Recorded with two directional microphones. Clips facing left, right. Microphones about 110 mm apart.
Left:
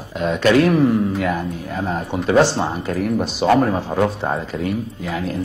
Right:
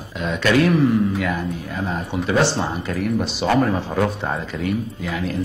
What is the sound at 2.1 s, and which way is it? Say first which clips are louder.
Speech: left 4 dB; 45° left (ahead or behind).